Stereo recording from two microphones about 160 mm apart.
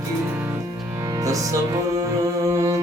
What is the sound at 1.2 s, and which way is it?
Music, 20° right (ahead or behind).